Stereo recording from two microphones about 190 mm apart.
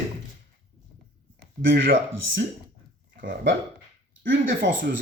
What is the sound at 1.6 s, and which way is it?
Speech, 80° right.